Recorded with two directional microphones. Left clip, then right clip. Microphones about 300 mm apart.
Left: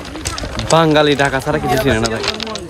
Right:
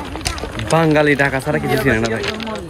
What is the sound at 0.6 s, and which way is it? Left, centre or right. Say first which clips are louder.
Speech: left 2 dB; centre.